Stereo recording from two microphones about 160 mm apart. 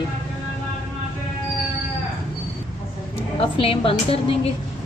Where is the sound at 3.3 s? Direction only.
35° left (ahead or behind).